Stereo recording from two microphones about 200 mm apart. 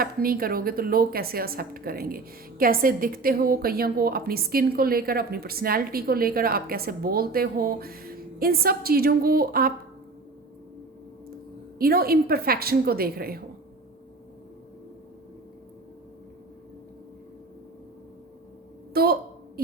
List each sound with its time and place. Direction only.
0.0 s a woman's voice: 45° right (ahead or behind)
11.8 s a woman's voice: 50° right (ahead or behind)
19.0 s a woman's voice: 50° right (ahead or behind)